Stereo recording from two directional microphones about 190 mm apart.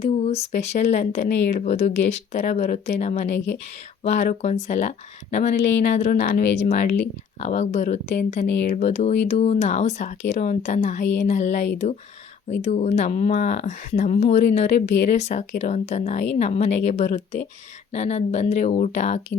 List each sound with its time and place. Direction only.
0.0 s speech: 35° left (ahead or behind)
5.5 s speech: 70° left (ahead or behind)
5.8 s speech: 40° left (ahead or behind)